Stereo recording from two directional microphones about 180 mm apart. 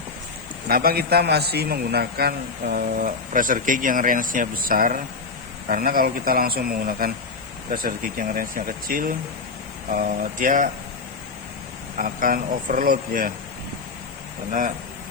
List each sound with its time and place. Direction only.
0.7 s a man's voice: 55° right (ahead or behind)
11.9 s a man's voice: 50° right (ahead or behind)